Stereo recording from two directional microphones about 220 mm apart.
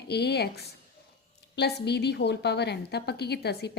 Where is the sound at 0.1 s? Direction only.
50° left (ahead or behind).